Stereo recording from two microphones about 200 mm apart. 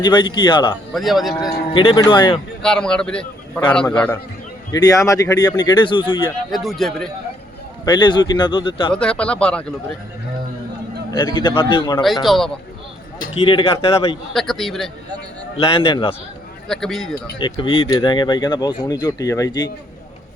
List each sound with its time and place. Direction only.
0.0 s speech: 20° left (ahead or behind)
0.9 s a man's voice: centre (ahead or behind)
1.7 s speech: 25° left (ahead or behind)
2.6 s a man's voice: 5° left (ahead or behind); by 6.2 s 25° left (ahead or behind)
6.5 s a man's voice: centre (ahead or behind)
7.9 s speech: 20° left (ahead or behind)
8.9 s a man's voice: 5° left (ahead or behind)
11.2 s speech: 20° left (ahead or behind)
12.0 s a man's voice: centre (ahead or behind)
13.4 s speech: 25° left (ahead or behind)
14.3 s a man's voice: centre (ahead or behind)
15.5 s speech: 25° left (ahead or behind)
16.6 s a man's voice: centre (ahead or behind)
17.3 s speech: 25° left (ahead or behind)